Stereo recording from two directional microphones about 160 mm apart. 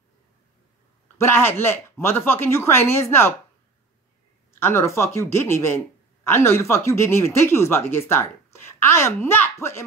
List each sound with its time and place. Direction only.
1.1 s speech: 15° left (ahead or behind)
4.6 s speech: 15° left (ahead or behind)